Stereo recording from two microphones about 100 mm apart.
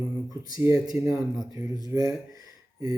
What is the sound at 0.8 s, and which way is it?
Speech, 35° right (ahead or behind).